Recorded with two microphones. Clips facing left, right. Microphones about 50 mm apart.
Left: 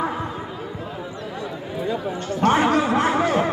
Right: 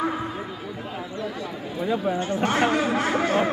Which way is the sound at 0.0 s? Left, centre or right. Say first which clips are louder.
Left 1 dB; centre.